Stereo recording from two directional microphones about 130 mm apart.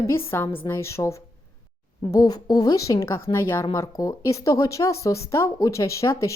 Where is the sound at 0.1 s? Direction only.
20° left (ahead or behind).